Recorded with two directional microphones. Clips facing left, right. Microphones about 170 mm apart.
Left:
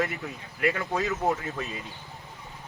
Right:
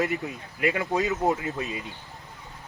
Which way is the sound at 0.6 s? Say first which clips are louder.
Right 2 dB; 20° right (ahead or behind).